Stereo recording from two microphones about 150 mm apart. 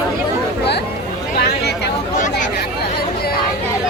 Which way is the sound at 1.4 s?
90° left.